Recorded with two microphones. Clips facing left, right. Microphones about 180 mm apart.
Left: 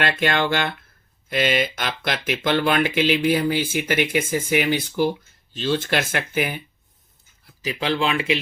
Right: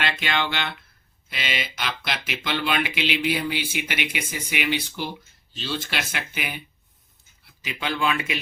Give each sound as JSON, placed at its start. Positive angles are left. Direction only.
{"t": 0.0, "sound": "speech", "side_deg": 50}
{"t": 7.4, "sound": "speech", "side_deg": 35}